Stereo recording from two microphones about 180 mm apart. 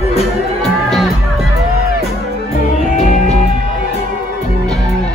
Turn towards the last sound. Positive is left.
turn(degrees=40)  # may be behind; listen again after turning